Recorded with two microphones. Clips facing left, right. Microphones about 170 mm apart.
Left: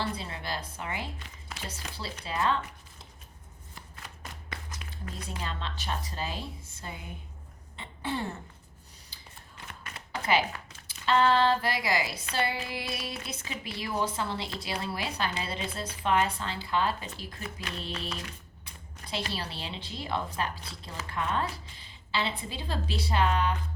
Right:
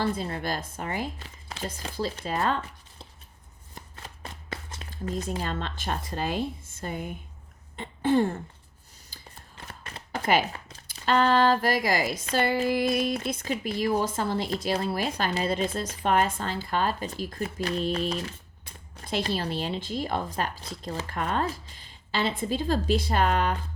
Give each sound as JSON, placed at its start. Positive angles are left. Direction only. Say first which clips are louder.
{"t": 0.0, "sound": "speech", "louder": "right 6 dB", "side_deg": -45}
{"t": 3.8, "sound": "shuffling cards", "louder": "right 4 dB", "side_deg": -30}
{"t": 5.2, "sound": "speech", "louder": "right 6 dB", "side_deg": -45}
{"t": 7.8, "sound": "a sound", "louder": "right 11 dB", "side_deg": -50}
{"t": 9.6, "sound": "a sound", "louder": "right 2 dB", "side_deg": -35}
{"t": 11.0, "sound": "speech", "louder": "right 2 dB", "side_deg": -45}
{"t": 19.3, "sound": "speech", "louder": "right 8 dB", "side_deg": -50}